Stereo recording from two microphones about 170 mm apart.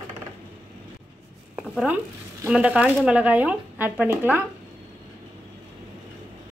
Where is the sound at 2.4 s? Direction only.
5° right (ahead or behind).